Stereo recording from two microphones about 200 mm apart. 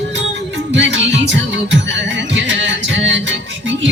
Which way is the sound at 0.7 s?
65° right (ahead or behind).